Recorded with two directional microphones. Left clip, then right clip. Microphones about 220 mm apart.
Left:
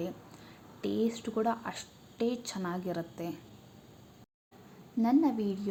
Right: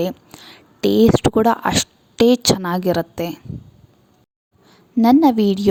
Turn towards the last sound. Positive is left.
turn(degrees=-45)  # may be behind; listen again after turning